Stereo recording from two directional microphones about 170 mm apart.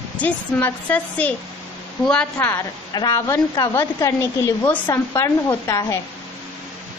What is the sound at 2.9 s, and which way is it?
A woman's voice, 20° left (ahead or behind).